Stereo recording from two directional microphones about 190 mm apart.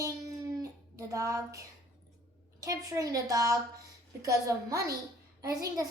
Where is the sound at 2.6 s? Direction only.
20° right (ahead or behind).